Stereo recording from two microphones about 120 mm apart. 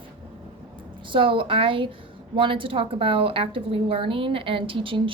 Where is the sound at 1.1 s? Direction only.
45° right (ahead or behind).